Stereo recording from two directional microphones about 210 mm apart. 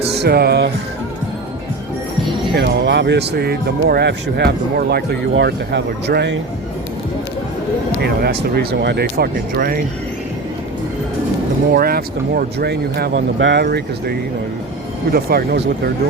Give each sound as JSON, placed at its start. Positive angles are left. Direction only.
{"t": 0.2, "sound": "music", "side_deg": -50}
{"t": 2.6, "sound": "speech", "side_deg": -55}
{"t": 8.0, "sound": "speech", "side_deg": -50}
{"t": 11.7, "sound": "speech", "side_deg": -45}
{"t": 15.1, "sound": "speech", "side_deg": -45}